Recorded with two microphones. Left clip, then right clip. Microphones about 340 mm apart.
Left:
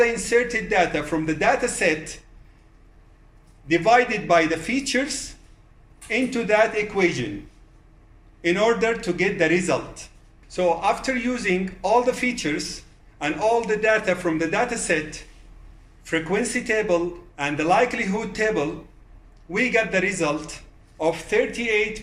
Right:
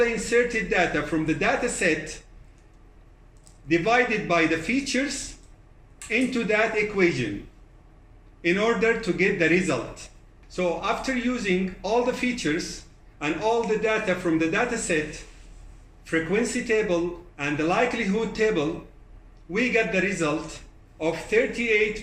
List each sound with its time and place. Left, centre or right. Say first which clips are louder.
0.0 s speech: left 2 dB; left
3.7 s speech: left 4 dB; left
8.4 s speech: left 3 dB; left